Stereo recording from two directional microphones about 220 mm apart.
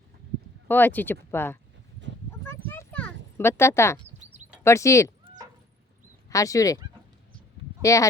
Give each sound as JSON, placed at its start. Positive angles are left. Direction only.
{"t": 0.7, "sound": "speech", "side_deg": 10}
{"t": 2.6, "sound": "a sound", "side_deg": 5}
{"t": 3.3, "sound": "speech", "side_deg": 10}
{"t": 6.3, "sound": "speech", "side_deg": 15}
{"t": 7.8, "sound": "speech", "side_deg": 15}